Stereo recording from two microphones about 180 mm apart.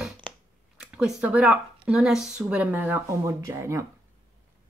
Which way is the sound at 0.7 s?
5° right (ahead or behind).